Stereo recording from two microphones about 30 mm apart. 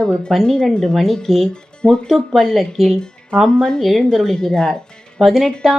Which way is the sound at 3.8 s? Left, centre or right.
Centre.